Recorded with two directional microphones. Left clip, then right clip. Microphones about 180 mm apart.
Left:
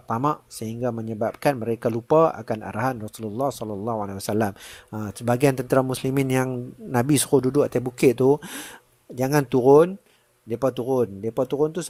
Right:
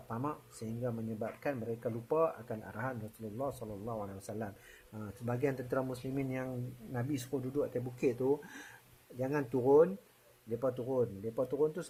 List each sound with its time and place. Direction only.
0.1 s speech: 45° left (ahead or behind)